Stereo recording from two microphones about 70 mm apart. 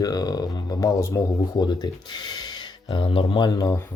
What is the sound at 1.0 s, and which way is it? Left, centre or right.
Speech, left.